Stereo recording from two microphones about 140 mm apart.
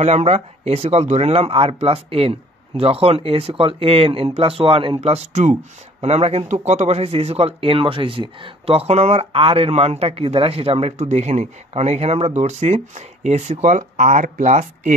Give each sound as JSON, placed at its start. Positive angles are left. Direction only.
{"t": 0.0, "sound": "speech", "side_deg": -55}